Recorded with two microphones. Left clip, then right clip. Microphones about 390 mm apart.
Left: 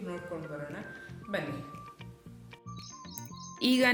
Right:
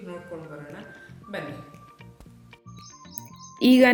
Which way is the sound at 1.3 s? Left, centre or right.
Centre.